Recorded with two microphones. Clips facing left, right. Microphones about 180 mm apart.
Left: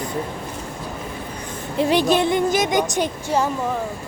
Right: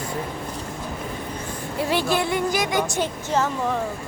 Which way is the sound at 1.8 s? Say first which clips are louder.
Left 5 dB; 20° left (ahead or behind).